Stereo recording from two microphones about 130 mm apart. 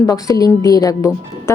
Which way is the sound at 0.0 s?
25° left (ahead or behind).